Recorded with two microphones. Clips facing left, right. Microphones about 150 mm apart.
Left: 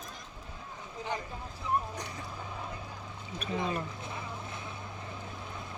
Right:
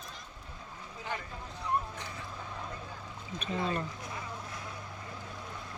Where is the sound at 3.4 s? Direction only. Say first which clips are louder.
Even; 5° left (ahead or behind).